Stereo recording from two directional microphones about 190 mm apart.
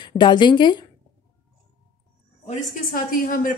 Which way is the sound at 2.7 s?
50° left (ahead or behind).